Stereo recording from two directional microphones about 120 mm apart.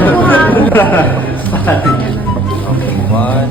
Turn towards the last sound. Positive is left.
turn(degrees=15)  # may be behind; listen again after turning